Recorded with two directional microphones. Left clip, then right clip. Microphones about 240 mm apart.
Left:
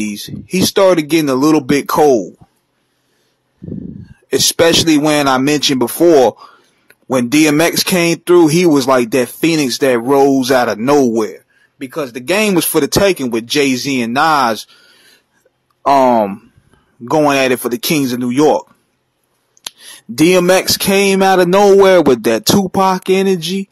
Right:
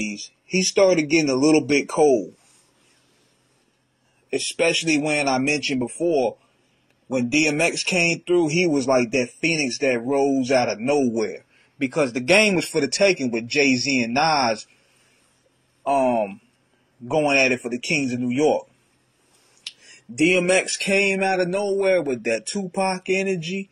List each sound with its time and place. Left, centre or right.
0.1 s speech: left
4.3 s speech: left
11.3 s speech: centre; by 14.7 s left
15.9 s speech: left
20.2 s speech: left